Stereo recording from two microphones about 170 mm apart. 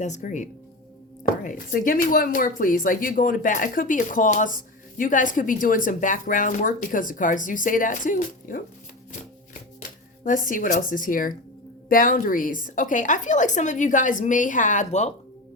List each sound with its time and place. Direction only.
0.0 s speech: 45° left (ahead or behind)
1.5 s speech: 50° left (ahead or behind)
10.2 s speech: 50° left (ahead or behind)